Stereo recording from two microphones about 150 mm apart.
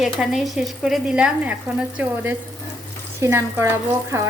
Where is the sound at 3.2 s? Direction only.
15° right (ahead or behind).